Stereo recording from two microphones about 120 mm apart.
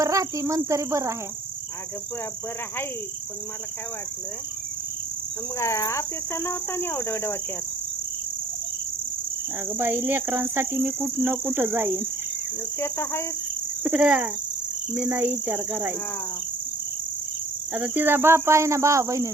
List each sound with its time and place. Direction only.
0.0 s speech: 25° right (ahead or behind)
5.5 s speech: 25° left (ahead or behind)
9.7 s cricket: 20° right (ahead or behind)
12.8 s speech: 20° left (ahead or behind)
13.8 s cricket: 10° right (ahead or behind)
17.7 s speech: 15° right (ahead or behind)